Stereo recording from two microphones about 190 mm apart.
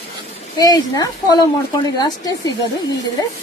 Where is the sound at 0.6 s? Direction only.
20° left (ahead or behind).